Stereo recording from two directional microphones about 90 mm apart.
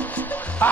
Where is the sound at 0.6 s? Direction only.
15° left (ahead or behind).